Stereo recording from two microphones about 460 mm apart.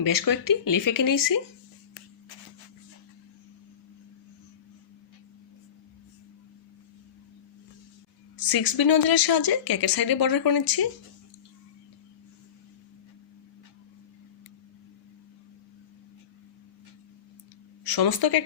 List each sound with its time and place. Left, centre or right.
0.0 s speech: left
8.4 s speech: left
17.8 s speech: left